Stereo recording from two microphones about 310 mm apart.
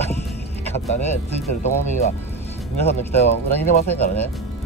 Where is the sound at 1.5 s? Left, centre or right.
Left.